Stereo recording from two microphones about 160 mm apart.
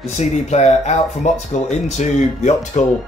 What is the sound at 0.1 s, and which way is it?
Speech, 45° left (ahead or behind).